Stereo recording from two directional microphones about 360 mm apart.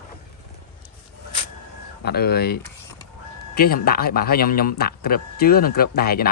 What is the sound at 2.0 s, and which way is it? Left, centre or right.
Speech, left.